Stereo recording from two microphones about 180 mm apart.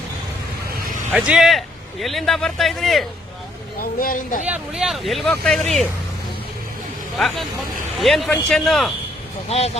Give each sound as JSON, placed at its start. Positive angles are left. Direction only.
{"t": 1.1, "sound": "a man's voice", "side_deg": -5}
{"t": 3.9, "sound": "speech", "side_deg": 50}
{"t": 4.4, "sound": "a man's voice", "side_deg": -5}
{"t": 7.2, "sound": "a man's voice", "side_deg": 0}
{"t": 9.5, "sound": "speech", "side_deg": 35}